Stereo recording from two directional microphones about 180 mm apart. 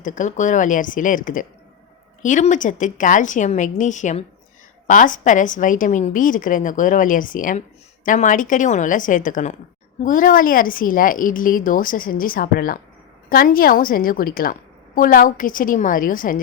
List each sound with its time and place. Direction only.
0.0 s a woman's voice: 45° left (ahead or behind)